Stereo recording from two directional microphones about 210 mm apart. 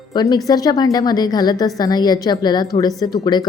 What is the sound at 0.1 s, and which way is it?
A woman's voice, 20° left (ahead or behind).